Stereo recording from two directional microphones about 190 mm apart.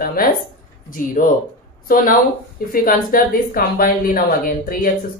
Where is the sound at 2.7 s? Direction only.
50° left (ahead or behind).